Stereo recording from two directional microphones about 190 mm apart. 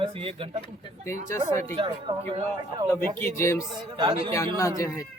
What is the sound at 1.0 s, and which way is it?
Speech, 15° left (ahead or behind).